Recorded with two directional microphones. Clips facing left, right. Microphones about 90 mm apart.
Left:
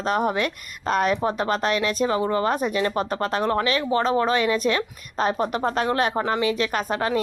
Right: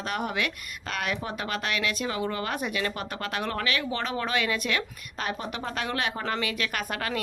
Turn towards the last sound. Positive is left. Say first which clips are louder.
# left 7 dB
turn(degrees=25)  # may be behind; listen again after turning